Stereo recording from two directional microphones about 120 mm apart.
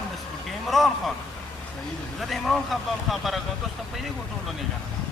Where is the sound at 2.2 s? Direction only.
Centre (ahead or behind).